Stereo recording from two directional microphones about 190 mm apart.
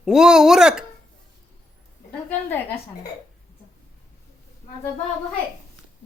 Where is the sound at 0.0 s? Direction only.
5° right (ahead or behind).